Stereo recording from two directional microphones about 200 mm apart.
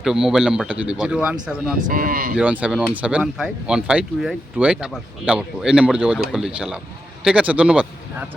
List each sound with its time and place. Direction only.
0.0 s speech: centre (ahead or behind)
1.9 s speech: 45° right (ahead or behind)
2.3 s speech: 5° right (ahead or behind)